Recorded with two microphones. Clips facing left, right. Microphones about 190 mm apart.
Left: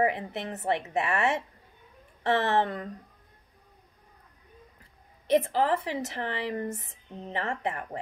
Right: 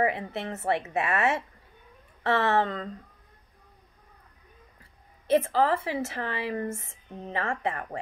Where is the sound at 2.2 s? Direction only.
15° left (ahead or behind).